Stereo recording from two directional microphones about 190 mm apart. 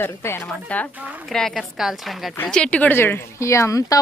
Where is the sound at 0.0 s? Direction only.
10° left (ahead or behind).